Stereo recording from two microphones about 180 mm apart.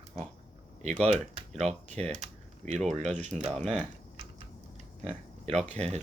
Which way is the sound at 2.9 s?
40° right (ahead or behind).